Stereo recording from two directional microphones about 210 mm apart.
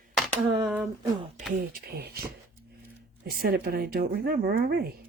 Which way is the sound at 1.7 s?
50° right (ahead or behind).